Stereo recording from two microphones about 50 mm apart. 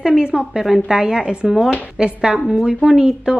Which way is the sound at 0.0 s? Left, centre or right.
Centre.